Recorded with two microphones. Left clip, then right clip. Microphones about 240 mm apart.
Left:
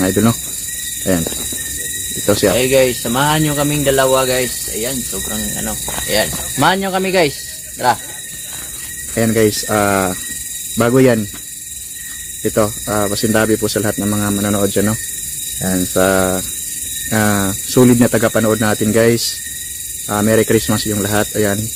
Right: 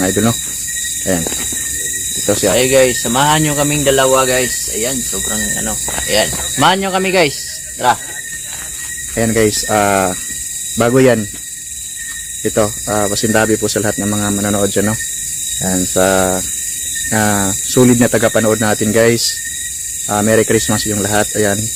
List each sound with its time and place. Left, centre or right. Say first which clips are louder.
0.0 s speech: even; centre
2.6 s speech: right 2 dB; centre
9.1 s speech: even; centre
12.4 s speech: right 1 dB; centre